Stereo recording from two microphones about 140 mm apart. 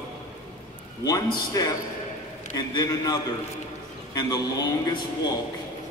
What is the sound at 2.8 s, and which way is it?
Speech, 25° left (ahead or behind).